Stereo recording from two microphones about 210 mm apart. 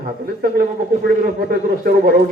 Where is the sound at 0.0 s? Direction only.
45° right (ahead or behind).